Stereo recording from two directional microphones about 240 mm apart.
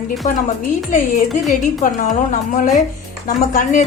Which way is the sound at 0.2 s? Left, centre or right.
Left.